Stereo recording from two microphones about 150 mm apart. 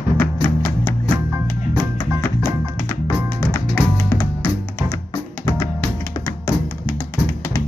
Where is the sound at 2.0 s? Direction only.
20° left (ahead or behind).